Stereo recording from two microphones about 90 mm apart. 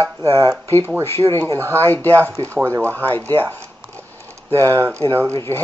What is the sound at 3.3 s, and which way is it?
Speech, 20° left (ahead or behind).